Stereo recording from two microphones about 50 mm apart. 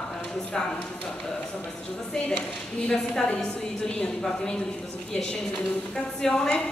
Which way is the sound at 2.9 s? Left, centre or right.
Centre.